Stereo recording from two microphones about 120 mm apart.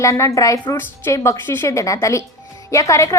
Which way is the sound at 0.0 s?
25° left (ahead or behind).